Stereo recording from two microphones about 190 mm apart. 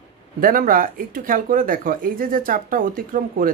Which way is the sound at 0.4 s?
50° right (ahead or behind).